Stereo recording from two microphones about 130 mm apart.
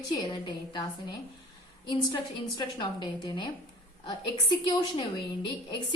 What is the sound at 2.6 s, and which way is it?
Speech, 35° left (ahead or behind).